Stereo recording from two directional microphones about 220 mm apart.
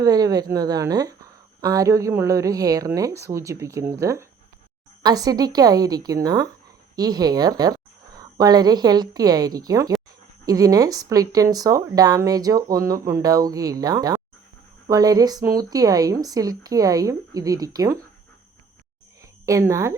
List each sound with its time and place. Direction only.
0.0 s a woman's voice: 15° right (ahead or behind)
19.2 s speech: 15° right (ahead or behind)